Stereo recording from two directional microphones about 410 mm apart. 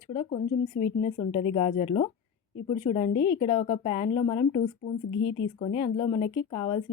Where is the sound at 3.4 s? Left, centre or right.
Centre.